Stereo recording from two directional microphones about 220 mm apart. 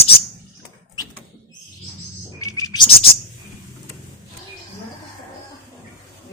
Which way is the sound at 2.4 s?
15° left (ahead or behind).